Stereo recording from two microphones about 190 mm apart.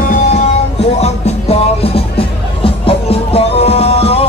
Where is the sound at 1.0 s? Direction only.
35° left (ahead or behind).